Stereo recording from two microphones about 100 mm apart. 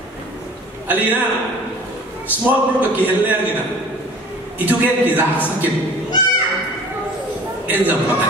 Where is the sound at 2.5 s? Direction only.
20° right (ahead or behind).